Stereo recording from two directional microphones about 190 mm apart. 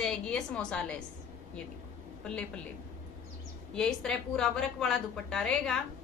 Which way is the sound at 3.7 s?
5° left (ahead or behind).